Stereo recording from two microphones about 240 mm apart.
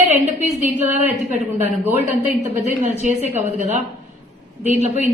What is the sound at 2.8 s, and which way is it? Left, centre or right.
Speech, right.